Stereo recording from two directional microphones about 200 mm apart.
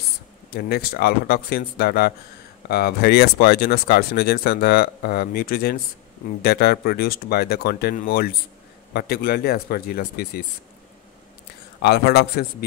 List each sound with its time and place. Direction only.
0.6 s speech: 50° left (ahead or behind)
11.8 s speech: 55° left (ahead or behind)